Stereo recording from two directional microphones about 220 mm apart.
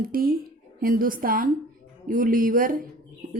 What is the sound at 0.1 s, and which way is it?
A woman's voice, 40° right (ahead or behind).